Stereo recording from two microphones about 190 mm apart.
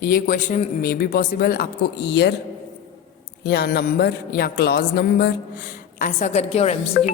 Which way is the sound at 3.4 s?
55° left (ahead or behind).